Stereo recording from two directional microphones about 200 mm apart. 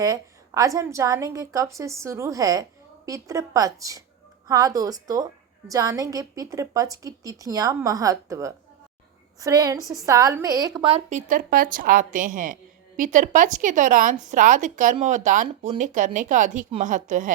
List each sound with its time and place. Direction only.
0.0 s a woman's voice: 15° right (ahead or behind)
9.8 s a woman's voice: centre (ahead or behind)
10.1 s a woman's voice: 15° right (ahead or behind)
11.3 s speech: 45° right (ahead or behind)